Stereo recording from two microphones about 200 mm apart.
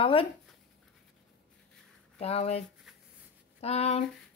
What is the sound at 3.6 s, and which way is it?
Speech, 30° left (ahead or behind).